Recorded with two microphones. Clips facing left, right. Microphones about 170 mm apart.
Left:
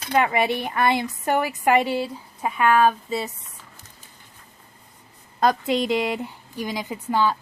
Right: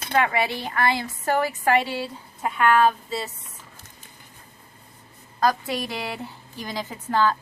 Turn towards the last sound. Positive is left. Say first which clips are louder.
# even
turn(degrees=10)  # may be behind; listen again after turning